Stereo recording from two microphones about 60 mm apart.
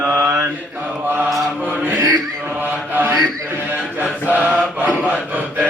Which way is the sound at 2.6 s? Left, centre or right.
Right.